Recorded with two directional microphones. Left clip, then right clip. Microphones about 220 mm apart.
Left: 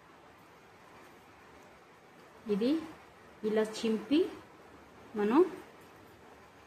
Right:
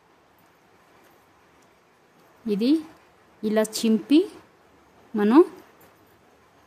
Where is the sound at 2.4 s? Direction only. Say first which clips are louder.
Right 8 dB; 55° right (ahead or behind).